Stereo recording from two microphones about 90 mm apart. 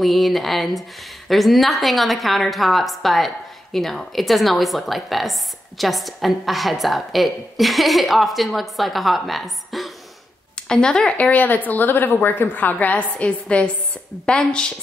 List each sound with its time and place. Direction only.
0.0 s a woman's voice: centre (ahead or behind)